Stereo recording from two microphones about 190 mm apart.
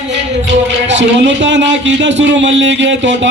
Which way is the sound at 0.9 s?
70° right (ahead or behind).